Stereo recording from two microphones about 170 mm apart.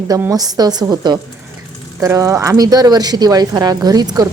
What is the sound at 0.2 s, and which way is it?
Speech, 20° right (ahead or behind).